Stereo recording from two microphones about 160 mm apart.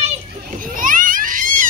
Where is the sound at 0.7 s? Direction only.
60° right (ahead or behind).